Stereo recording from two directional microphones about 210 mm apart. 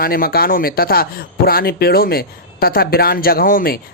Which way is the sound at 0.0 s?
45° left (ahead or behind).